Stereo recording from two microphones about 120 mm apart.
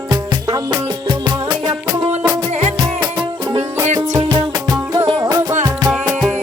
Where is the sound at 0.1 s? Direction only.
30° right (ahead or behind).